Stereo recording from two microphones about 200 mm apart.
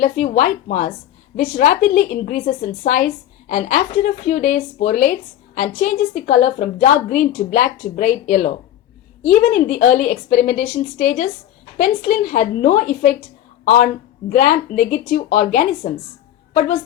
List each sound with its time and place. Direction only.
0.3 s a woman's voice: 40° left (ahead or behind)